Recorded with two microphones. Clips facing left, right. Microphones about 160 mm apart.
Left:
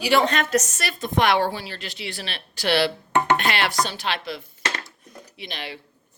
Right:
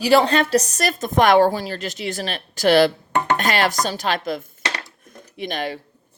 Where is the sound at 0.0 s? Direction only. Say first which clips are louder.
Right 5 dB; 35° right (ahead or behind).